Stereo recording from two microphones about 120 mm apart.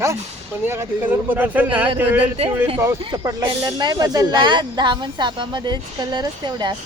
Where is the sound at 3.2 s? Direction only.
35° right (ahead or behind).